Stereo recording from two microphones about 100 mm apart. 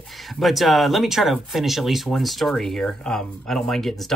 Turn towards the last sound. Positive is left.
turn(degrees=5)  # may be behind; listen again after turning